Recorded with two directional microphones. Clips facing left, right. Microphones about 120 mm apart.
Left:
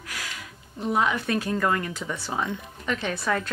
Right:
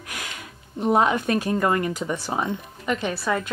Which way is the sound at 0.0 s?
20° right (ahead or behind).